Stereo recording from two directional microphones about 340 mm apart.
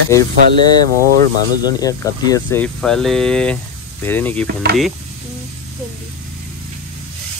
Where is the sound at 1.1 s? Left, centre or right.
Right.